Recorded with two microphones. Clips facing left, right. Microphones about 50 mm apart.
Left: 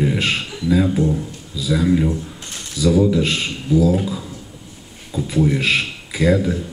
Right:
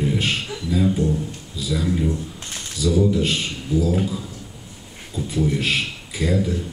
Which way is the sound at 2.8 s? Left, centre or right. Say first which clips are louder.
Left 3 dB; left.